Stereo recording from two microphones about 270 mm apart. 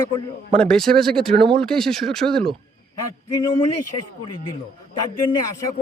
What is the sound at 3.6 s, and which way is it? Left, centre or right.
Speech, left.